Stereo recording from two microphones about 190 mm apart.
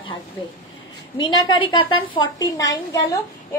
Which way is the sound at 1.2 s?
20° left (ahead or behind).